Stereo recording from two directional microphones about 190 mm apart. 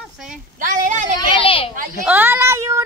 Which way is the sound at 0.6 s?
40° right (ahead or behind).